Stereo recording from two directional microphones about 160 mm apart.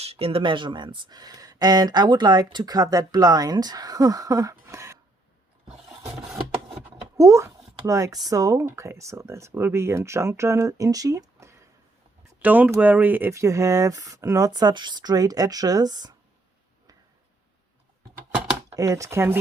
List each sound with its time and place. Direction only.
0.0 s speech: 35° right (ahead or behind); by 4.9 s 20° right (ahead or behind)
7.2 s speech: 20° right (ahead or behind)
18.8 s speech: 20° right (ahead or behind)